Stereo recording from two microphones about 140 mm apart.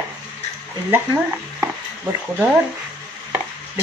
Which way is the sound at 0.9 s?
15° right (ahead or behind).